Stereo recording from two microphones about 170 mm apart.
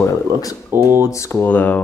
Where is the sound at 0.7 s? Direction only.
15° right (ahead or behind).